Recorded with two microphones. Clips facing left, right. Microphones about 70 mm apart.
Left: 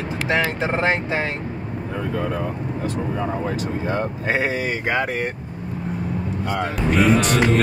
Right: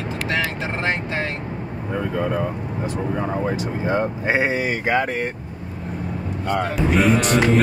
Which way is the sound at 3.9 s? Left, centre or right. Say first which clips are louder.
Right 4 dB; centre.